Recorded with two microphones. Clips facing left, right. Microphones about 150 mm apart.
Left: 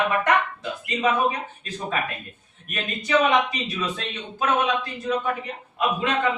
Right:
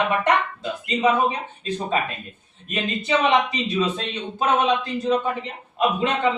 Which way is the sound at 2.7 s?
25° right (ahead or behind).